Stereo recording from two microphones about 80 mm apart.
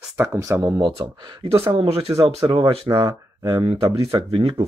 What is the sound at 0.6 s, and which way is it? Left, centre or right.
Speech, right.